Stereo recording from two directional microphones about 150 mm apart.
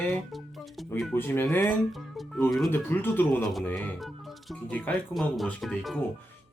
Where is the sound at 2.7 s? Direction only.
15° left (ahead or behind).